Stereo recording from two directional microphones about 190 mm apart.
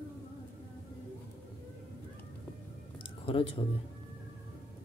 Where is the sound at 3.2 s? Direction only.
30° left (ahead or behind).